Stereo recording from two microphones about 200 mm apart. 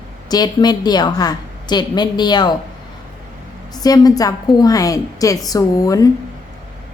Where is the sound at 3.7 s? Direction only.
20° left (ahead or behind).